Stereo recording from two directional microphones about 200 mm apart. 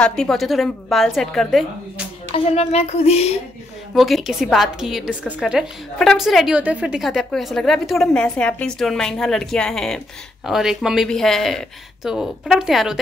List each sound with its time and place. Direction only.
0.0 s a woman's voice: 5° left (ahead or behind)
2.3 s speech: 30° left (ahead or behind)
3.9 s a woman's voice: centre (ahead or behind)